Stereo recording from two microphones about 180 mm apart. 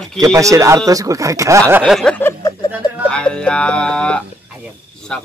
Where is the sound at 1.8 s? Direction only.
Centre (ahead or behind).